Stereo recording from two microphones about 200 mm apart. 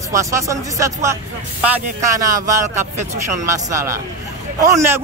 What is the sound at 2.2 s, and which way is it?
Speech, 15° right (ahead or behind).